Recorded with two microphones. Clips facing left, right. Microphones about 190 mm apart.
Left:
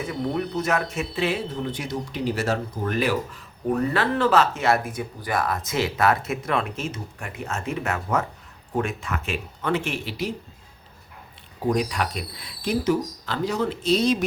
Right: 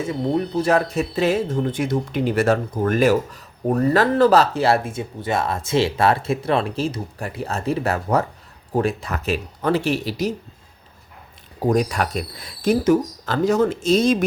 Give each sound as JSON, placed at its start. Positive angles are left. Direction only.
{"t": 0.0, "sound": "speech", "side_deg": -25}
{"t": 11.7, "sound": "speech", "side_deg": -45}